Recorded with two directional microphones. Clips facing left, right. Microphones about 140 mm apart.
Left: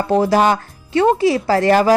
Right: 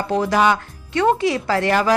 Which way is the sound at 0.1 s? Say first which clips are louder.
Left 3 dB; 35° left (ahead or behind).